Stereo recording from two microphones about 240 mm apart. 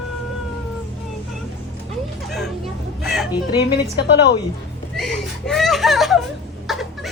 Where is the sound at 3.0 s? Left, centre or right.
Centre.